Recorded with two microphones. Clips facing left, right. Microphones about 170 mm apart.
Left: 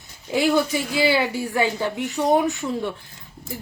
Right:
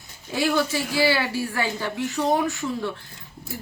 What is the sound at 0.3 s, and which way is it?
Speech, 15° left (ahead or behind).